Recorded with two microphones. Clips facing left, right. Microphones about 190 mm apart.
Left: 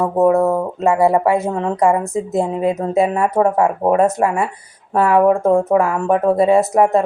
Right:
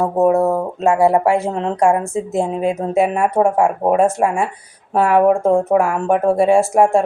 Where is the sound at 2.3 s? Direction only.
25° right (ahead or behind).